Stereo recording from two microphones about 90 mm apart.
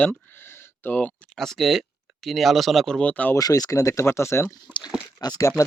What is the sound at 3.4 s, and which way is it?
Speech, 45° left (ahead or behind).